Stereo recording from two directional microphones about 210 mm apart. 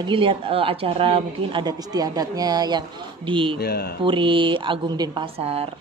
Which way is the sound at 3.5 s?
50° left (ahead or behind).